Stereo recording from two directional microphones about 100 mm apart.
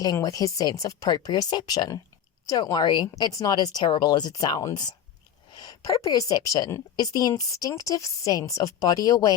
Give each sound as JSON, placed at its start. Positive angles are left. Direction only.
{"t": 0.0, "sound": "speech", "side_deg": 40}